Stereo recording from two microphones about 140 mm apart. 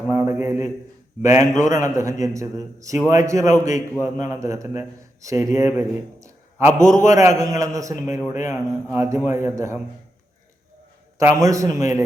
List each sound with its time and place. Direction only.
0.1 s a sound: 20° right (ahead or behind)
1.2 s a man's voice: 20° right (ahead or behind)
11.4 s a man's voice: 20° right (ahead or behind)